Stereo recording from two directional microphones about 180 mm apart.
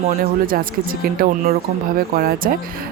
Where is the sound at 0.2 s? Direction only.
50° right (ahead or behind).